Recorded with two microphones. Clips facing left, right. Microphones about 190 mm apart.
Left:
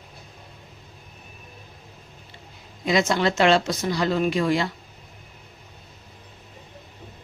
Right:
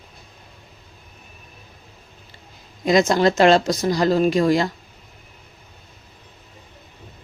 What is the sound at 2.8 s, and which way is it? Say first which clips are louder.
Speech: right 5 dB; 40° right (ahead or behind).